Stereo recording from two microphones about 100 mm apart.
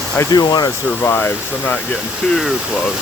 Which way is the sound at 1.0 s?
20° left (ahead or behind).